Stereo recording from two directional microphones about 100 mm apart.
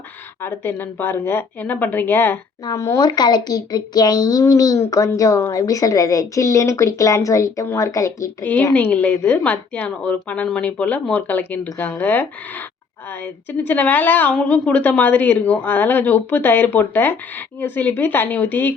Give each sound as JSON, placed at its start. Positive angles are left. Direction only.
{"t": 0.4, "sound": "a woman's voice", "side_deg": 20}
{"t": 2.7, "sound": "speech", "side_deg": 30}
{"t": 3.0, "sound": "speech", "side_deg": 45}
{"t": 8.7, "sound": "a woman's voice", "side_deg": 15}